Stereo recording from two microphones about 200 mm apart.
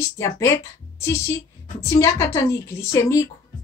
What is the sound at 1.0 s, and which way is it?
A woman's voice, 15° left (ahead or behind).